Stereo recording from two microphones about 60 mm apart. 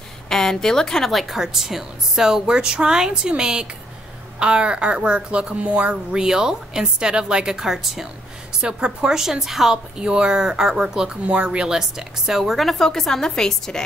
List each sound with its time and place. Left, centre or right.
0.3 s speech: centre